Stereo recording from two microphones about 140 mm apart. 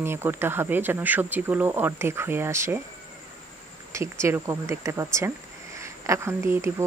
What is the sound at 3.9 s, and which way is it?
Speech, 20° right (ahead or behind).